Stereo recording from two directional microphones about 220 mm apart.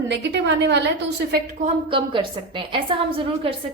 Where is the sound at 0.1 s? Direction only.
50° right (ahead or behind).